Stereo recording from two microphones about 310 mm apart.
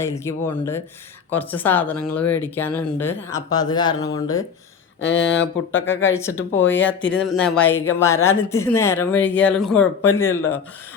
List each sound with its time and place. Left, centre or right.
0.0 s speech: centre
4.9 s speech: left
6.1 s speech: centre